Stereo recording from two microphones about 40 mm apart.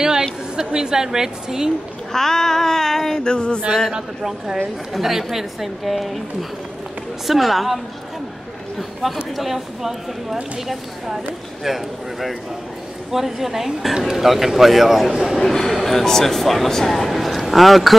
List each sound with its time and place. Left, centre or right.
0.7 s a woman's voice: centre
2.1 s a sound: centre
3.3 s music: left
4.9 s speech: centre
7.2 s a woman's voice: centre
15.4 s speech: centre